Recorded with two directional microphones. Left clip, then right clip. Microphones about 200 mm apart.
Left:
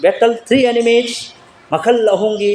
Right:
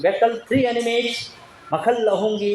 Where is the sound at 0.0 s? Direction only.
40° left (ahead or behind).